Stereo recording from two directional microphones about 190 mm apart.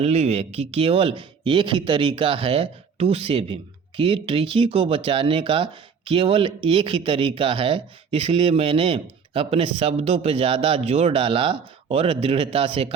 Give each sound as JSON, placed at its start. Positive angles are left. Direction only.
{"t": 0.0, "sound": "speech", "side_deg": -35}